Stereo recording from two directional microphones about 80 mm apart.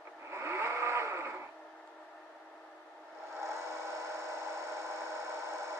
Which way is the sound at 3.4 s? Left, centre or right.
Right.